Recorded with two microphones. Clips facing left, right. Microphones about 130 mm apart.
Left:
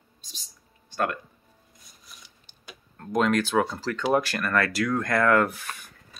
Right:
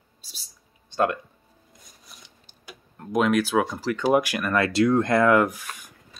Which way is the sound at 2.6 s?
10° right (ahead or behind).